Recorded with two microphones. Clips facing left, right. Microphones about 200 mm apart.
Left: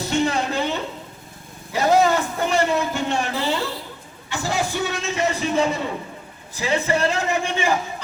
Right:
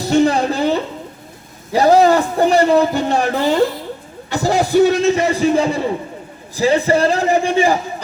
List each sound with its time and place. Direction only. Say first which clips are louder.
0.1 s a sound: right 8 dB; 35° right (ahead or behind)
1.7 s a man's voice: right 6 dB; 35° right (ahead or behind)
3.4 s a man's voice: right 9 dB; 45° right (ahead or behind)